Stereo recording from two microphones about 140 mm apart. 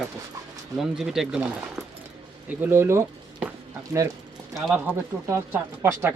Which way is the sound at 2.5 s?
15° right (ahead or behind).